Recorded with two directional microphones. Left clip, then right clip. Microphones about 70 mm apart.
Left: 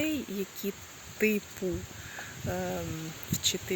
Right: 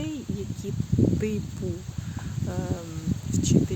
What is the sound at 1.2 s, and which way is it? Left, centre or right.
Speech, right.